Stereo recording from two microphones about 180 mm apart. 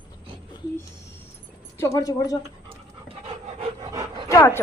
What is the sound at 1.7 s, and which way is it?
Speech, 15° left (ahead or behind).